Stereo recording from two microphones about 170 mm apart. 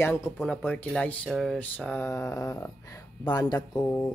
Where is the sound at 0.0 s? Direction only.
15° left (ahead or behind).